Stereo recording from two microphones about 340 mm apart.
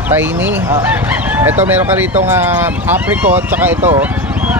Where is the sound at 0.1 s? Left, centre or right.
Centre.